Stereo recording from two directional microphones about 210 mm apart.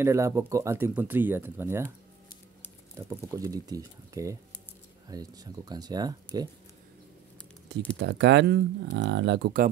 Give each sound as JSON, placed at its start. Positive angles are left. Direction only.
{"t": 0.0, "sound": "speech", "side_deg": -15}
{"t": 3.1, "sound": "speech", "side_deg": -15}
{"t": 8.0, "sound": "speech", "side_deg": -55}